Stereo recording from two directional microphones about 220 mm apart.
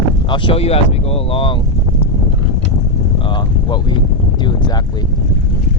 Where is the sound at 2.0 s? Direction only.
25° left (ahead or behind).